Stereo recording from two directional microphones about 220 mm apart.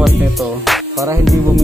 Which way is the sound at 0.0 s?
Centre (ahead or behind).